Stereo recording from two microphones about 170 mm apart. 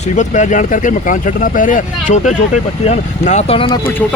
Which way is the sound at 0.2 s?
45° left (ahead or behind).